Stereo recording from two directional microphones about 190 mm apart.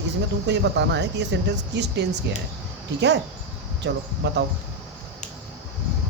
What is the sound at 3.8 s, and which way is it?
Speech, 65° right (ahead or behind).